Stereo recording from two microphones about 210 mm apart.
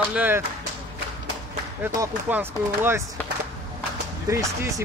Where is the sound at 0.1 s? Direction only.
5° right (ahead or behind).